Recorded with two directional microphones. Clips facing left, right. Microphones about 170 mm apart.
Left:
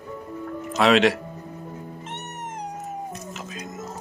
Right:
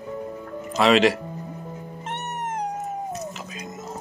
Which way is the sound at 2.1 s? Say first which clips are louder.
Right 8 dB; 55° right (ahead or behind).